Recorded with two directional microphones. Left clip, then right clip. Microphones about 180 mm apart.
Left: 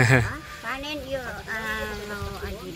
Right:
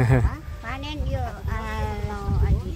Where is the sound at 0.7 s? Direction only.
30° right (ahead or behind).